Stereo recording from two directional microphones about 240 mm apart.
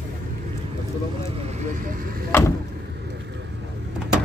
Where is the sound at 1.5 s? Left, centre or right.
Right.